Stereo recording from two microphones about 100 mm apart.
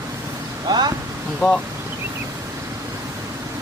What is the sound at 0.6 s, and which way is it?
Speech, 45° right (ahead or behind).